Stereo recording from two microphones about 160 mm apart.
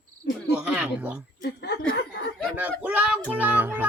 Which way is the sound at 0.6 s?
10° right (ahead or behind).